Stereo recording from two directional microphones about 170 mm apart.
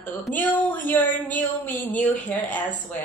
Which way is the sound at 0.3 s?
10° left (ahead or behind).